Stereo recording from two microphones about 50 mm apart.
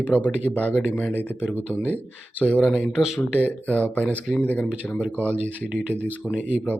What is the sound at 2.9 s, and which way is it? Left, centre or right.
Speech, centre.